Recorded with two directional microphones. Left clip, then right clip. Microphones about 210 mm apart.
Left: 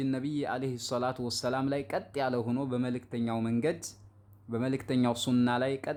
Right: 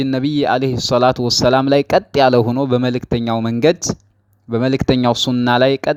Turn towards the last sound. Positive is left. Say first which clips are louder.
# right 16 dB
turn(degrees=-40)  # may be behind; listen again after turning